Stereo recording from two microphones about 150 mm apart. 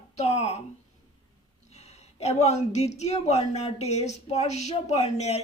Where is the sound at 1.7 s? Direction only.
45° left (ahead or behind).